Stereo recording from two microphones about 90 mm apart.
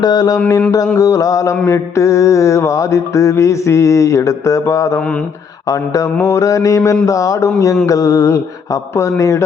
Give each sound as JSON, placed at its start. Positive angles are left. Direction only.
{"t": 0.0, "sound": "mantra", "side_deg": 50}
{"t": 0.9, "sound": "mantra", "side_deg": 35}